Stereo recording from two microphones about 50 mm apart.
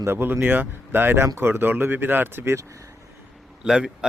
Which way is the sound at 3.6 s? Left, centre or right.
Centre.